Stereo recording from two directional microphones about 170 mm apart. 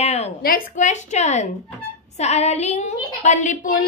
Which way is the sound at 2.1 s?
40° left (ahead or behind).